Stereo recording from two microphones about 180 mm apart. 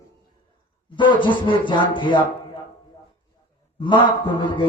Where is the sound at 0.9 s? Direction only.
25° left (ahead or behind).